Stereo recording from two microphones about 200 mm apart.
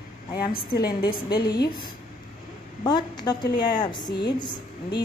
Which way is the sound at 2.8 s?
20° left (ahead or behind).